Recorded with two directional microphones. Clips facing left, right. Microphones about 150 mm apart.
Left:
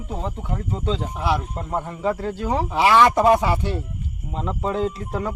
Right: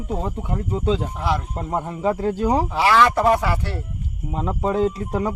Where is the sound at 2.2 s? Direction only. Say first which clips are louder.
Right 4 dB; 40° right (ahead or behind).